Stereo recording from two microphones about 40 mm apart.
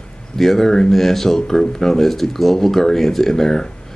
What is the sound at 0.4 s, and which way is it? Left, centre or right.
Speech, centre.